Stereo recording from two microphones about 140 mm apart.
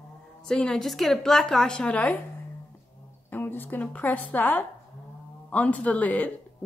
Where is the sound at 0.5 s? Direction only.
5° left (ahead or behind).